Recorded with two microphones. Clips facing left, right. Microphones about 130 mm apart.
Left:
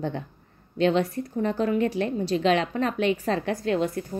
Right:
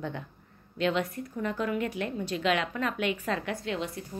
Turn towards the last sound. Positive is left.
turn(degrees=50)  # may be behind; listen again after turning